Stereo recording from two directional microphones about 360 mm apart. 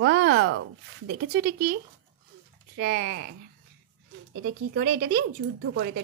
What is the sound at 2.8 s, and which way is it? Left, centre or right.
Speech, right.